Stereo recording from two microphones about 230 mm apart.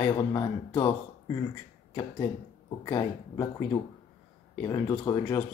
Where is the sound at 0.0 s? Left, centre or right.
Left.